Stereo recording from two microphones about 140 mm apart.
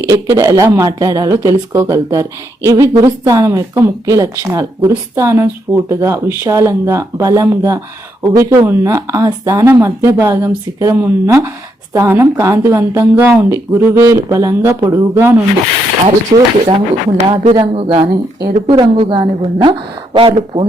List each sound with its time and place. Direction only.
0.1 s speech: 25° right (ahead or behind)
16.3 s speech: 40° right (ahead or behind)